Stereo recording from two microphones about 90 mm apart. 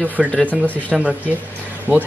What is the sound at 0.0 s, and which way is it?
Speech, 20° right (ahead or behind).